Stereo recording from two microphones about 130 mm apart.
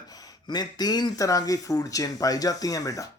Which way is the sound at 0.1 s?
30° left (ahead or behind).